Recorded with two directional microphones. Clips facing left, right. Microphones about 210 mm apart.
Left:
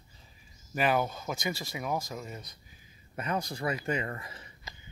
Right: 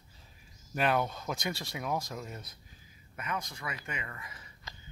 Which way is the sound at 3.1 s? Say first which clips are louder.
Left 5 dB; 35° left (ahead or behind).